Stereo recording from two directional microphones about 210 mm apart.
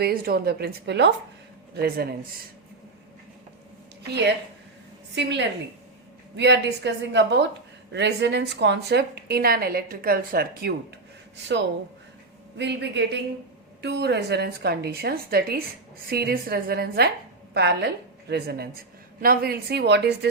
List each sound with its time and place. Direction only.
0.0 s a woman's voice: 45° right (ahead or behind)
4.0 s a woman's voice: 55° right (ahead or behind)
12.5 s a woman's voice: 55° right (ahead or behind)